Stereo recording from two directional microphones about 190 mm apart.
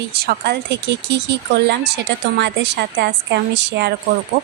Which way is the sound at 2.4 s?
60° right (ahead or behind).